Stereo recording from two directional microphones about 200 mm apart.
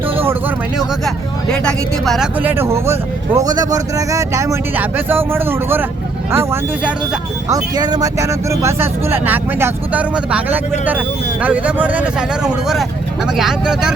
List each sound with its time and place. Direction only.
0.8 s speech: centre (ahead or behind)